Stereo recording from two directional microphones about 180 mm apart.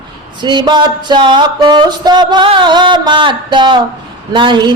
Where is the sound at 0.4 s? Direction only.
25° right (ahead or behind).